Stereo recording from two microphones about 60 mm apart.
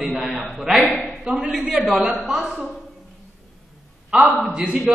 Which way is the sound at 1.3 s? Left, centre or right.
Centre.